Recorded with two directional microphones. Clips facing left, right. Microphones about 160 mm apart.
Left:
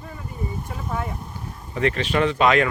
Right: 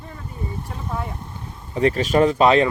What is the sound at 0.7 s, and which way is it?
Vehicle, 5° left (ahead or behind).